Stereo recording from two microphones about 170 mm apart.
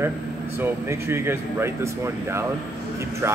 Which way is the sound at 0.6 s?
15° right (ahead or behind).